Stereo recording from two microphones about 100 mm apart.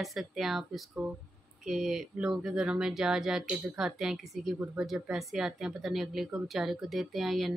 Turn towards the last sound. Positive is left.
turn(degrees=0)  # may be behind; listen again after turning